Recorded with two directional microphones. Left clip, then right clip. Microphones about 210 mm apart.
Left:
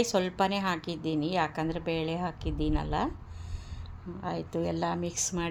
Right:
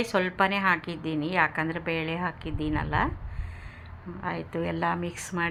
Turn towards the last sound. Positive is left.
turn(degrees=10)  # may be behind; listen again after turning